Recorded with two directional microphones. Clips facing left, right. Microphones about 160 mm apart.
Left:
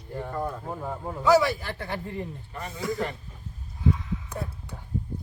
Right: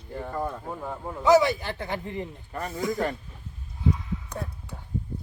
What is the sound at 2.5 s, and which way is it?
Speech, 40° right (ahead or behind).